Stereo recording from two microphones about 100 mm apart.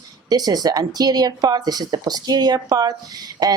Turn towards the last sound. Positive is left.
turn(degrees=-40)  # may be behind; listen again after turning